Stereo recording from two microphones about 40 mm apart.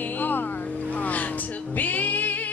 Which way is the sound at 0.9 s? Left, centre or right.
Left.